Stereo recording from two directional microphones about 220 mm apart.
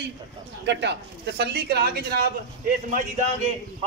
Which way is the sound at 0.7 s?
50° right (ahead or behind).